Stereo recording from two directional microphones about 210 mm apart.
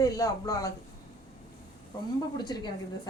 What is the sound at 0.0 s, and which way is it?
Speech, 15° left (ahead or behind).